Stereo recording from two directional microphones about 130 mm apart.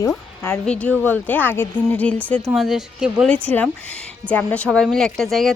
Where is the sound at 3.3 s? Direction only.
10° left (ahead or behind).